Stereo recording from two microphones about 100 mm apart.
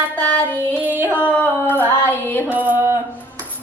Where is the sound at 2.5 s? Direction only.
20° right (ahead or behind).